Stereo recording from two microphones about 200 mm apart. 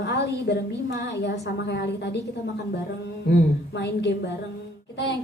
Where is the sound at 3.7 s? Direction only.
60° left (ahead or behind).